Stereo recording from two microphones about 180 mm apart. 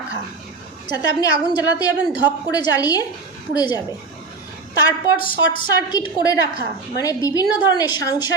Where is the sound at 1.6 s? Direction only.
20° left (ahead or behind).